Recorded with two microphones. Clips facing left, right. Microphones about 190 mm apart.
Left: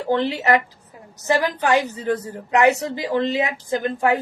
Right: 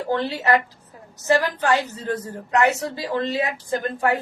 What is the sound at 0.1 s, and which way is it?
A woman's voice, 20° left (ahead or behind).